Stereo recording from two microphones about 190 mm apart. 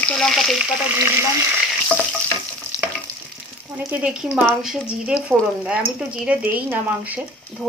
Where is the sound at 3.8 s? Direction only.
10° right (ahead or behind).